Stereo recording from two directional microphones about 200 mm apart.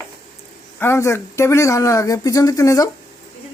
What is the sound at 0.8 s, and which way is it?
Speech, 10° left (ahead or behind).